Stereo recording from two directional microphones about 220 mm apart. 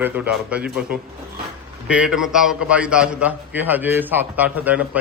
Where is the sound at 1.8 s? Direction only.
5° right (ahead or behind).